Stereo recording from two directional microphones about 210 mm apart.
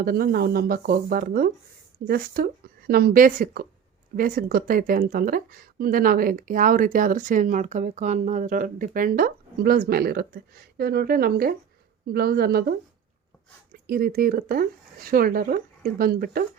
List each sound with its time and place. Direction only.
0.0 s speech: 45° right (ahead or behind)
13.8 s speech: 45° right (ahead or behind)